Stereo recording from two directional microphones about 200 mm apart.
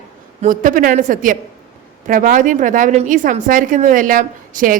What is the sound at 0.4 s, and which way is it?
A woman's voice, 40° right (ahead or behind).